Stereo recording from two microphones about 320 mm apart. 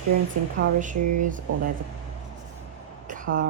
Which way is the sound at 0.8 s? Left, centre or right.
Right.